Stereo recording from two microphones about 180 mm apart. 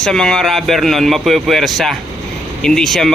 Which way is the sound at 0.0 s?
5° left (ahead or behind).